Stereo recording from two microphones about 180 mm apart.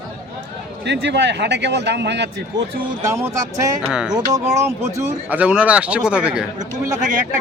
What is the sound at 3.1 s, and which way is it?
Speech, 15° right (ahead or behind).